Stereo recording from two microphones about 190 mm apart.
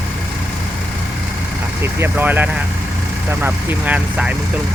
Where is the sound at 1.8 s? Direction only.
10° right (ahead or behind).